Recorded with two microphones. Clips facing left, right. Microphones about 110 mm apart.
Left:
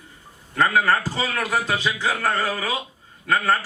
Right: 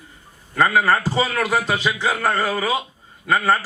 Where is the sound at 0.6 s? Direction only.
20° right (ahead or behind).